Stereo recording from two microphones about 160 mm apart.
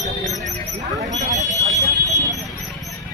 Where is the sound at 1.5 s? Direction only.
20° left (ahead or behind).